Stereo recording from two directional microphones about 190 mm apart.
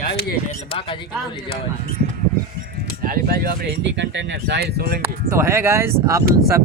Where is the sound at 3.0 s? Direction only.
50° right (ahead or behind).